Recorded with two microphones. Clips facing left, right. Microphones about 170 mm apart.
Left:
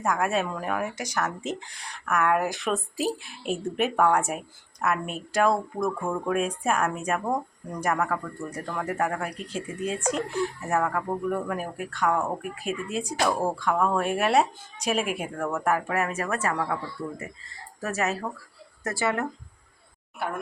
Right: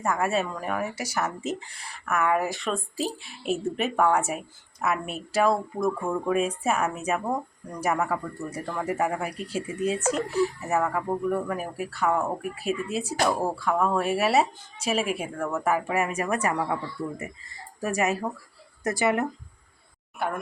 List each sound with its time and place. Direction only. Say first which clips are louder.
0.0 s speech: even; centre (ahead or behind)
17.7 s speech: right 2 dB; 15° right (ahead or behind)